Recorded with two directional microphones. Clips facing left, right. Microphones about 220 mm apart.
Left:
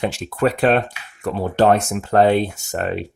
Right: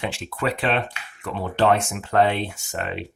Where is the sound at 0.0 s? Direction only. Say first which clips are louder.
Left 7 dB; 45° left (ahead or behind).